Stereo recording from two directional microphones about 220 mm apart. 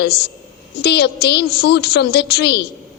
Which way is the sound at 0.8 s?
50° left (ahead or behind).